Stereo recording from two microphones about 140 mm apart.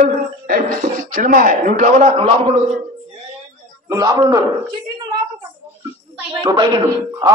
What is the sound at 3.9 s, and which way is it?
Speech, 25° right (ahead or behind).